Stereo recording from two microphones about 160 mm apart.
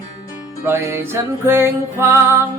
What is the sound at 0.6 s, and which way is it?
Music, 15° right (ahead or behind).